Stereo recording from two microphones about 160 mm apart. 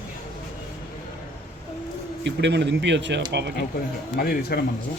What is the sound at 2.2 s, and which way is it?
Speech, 90° right.